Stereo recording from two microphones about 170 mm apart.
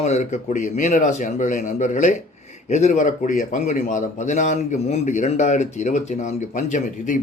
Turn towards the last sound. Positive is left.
turn(degrees=50)  # may be behind; listen again after turning